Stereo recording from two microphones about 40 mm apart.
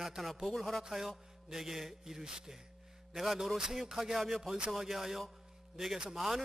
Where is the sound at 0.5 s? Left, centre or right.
Centre.